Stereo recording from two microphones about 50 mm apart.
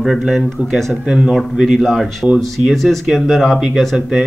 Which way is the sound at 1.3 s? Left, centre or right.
Centre.